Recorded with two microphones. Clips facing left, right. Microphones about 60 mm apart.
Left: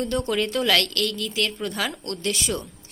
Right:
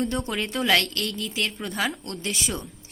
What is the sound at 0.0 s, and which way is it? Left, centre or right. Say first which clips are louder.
A woman's voice: left 3 dB; centre.